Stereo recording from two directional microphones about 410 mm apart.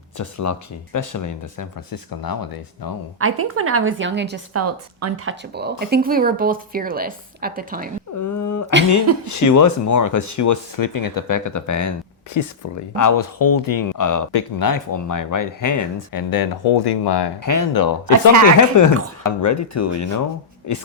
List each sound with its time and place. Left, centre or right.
0.2 s speech: left
3.2 s a woman's voice: right
8.2 s a sound: left
9.2 s speech: left
17.4 s speech: left